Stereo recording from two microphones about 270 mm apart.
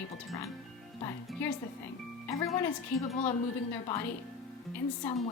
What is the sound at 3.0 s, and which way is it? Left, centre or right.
Speech, left.